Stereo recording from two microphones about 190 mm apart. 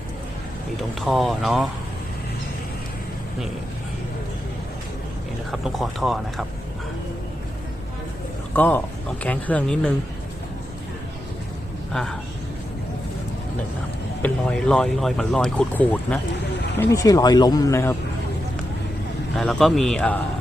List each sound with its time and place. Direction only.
1.0 s speech: centre (ahead or behind)
5.5 s speech: centre (ahead or behind)
8.5 s speech: 10° left (ahead or behind)
11.9 s speech: 5° left (ahead or behind)
14.2 s speech: 10° left (ahead or behind)
19.4 s speech: centre (ahead or behind)